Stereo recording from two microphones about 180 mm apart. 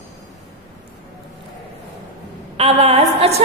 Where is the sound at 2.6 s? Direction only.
35° right (ahead or behind).